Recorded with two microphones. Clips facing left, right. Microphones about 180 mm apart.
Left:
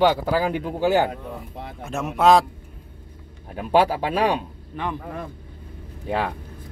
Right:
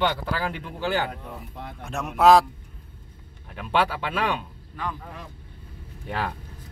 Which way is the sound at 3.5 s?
40° left (ahead or behind).